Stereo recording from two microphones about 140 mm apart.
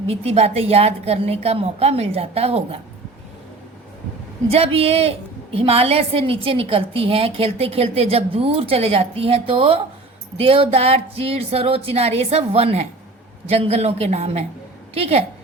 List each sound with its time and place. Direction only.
0.1 s a woman's voice: 45° right (ahead or behind)
4.4 s a woman's voice: 45° right (ahead or behind)